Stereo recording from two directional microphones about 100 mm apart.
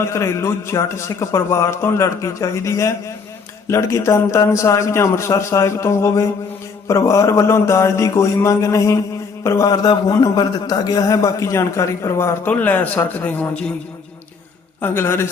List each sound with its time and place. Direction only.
0.0 s a man's voice: 30° left (ahead or behind)
12.5 s a man's voice: 15° left (ahead or behind)
14.8 s a man's voice: 25° left (ahead or behind)